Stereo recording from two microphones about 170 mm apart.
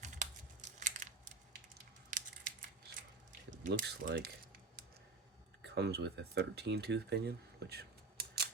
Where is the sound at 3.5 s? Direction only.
50° right (ahead or behind).